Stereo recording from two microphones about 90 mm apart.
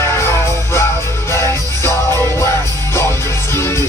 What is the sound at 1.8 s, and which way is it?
Music, 30° left (ahead or behind).